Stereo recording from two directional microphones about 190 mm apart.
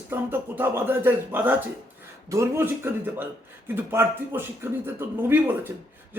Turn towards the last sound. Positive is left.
turn(degrees=-10)  # may be behind; listen again after turning